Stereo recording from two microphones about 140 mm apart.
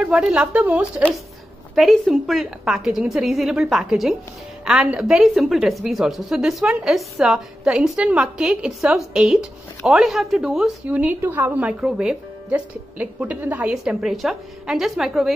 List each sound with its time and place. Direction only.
0.0 s a woman's voice: 5° right (ahead or behind)